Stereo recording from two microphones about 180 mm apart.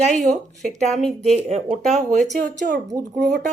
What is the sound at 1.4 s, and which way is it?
A man's voice, 35° right (ahead or behind).